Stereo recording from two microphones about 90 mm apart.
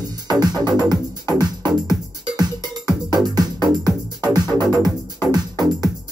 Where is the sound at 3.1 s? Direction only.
50° right (ahead or behind).